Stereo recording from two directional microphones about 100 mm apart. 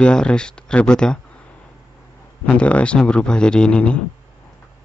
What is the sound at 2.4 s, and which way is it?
Speech, 10° left (ahead or behind).